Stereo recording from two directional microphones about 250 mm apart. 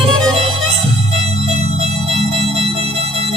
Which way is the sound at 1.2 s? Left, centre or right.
Right.